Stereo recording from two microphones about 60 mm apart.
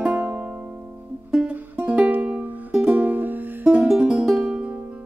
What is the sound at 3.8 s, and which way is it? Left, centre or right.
Music, centre.